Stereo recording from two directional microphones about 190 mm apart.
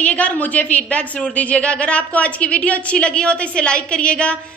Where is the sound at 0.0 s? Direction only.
5° left (ahead or behind).